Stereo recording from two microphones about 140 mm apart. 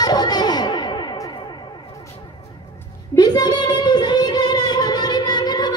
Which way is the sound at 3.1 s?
30° left (ahead or behind).